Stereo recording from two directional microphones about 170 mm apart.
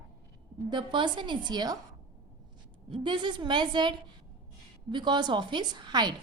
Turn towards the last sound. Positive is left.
turn(degrees=-25)  # may be behind; listen again after turning